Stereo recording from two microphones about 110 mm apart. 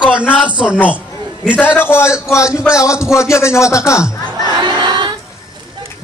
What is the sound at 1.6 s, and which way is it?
A man's voice, 20° left (ahead or behind).